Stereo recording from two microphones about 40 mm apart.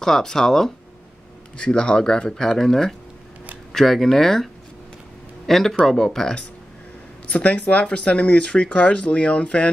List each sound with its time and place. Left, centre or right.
0.0 s speech: centre
1.6 s speech: left
2.3 s speech: centre
5.5 s speech: centre
7.2 s speech: left